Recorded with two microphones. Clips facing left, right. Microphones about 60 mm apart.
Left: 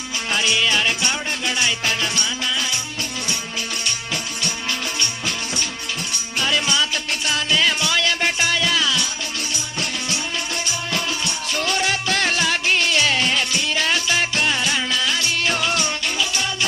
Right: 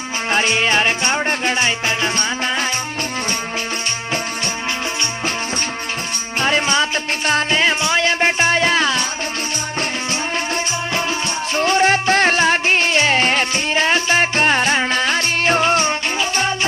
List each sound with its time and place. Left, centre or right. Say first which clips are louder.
0.3 s music: right 3 dB; right
6.4 s music: right 4 dB; right
11.5 s music: right 8 dB; right